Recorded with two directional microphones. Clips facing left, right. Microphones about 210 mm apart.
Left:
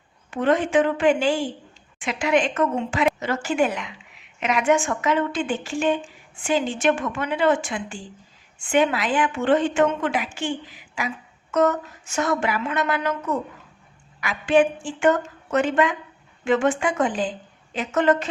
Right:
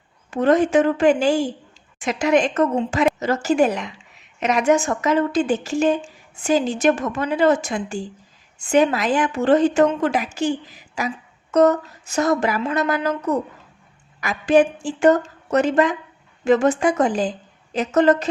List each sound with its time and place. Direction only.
0.3 s a woman's voice: 40° right (ahead or behind)